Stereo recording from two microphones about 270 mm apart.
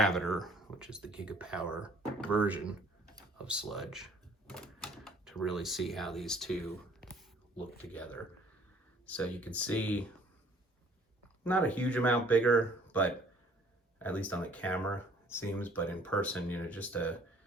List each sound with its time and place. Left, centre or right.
0.0 s speech: centre
3.2 s typewriter: centre
7.9 s speech: centre
11.4 s speech: centre